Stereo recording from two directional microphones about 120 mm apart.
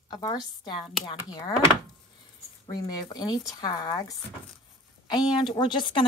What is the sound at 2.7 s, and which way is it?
Speech, 30° left (ahead or behind).